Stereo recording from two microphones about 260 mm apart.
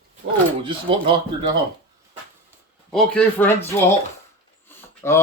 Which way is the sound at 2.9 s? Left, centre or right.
Centre.